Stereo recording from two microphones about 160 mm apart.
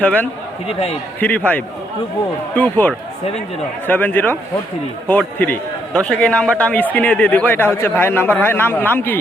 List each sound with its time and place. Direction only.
0.0 s a man's voice: 10° left (ahead or behind)
0.7 s speech: 40° left (ahead or behind)
1.2 s a man's voice: 10° left (ahead or behind)